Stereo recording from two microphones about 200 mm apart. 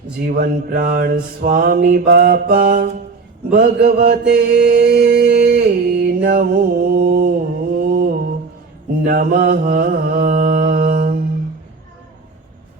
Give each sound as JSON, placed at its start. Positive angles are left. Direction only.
{"t": 0.3, "sound": "mantra", "side_deg": -45}
{"t": 9.0, "sound": "mantra", "side_deg": -50}